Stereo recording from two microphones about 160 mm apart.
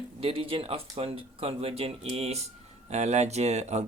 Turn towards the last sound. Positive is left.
turn(degrees=-45)  # may be behind; listen again after turning